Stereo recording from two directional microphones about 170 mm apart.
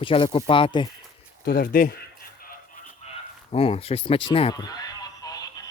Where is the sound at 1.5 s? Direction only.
60° left (ahead or behind).